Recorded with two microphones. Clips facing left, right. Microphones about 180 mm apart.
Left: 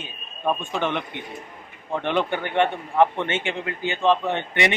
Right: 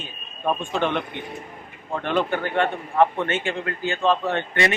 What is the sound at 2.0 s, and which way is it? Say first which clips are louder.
A man's voice: right 1 dB; 20° left (ahead or behind).